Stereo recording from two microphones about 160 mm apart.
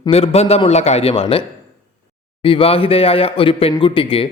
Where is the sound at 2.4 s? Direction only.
35° left (ahead or behind).